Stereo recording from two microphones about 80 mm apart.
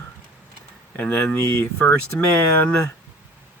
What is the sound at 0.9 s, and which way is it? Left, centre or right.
Speech, centre.